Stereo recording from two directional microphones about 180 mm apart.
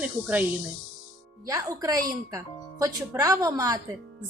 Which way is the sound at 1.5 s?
20° right (ahead or behind).